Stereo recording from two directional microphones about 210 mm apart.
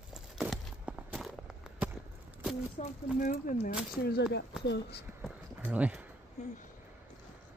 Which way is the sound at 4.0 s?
50° left (ahead or behind).